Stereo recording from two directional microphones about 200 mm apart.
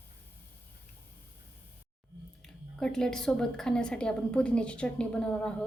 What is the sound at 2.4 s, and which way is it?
Speech, 5° left (ahead or behind).